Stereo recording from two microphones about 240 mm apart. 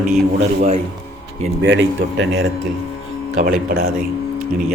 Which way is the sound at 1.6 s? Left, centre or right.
Right.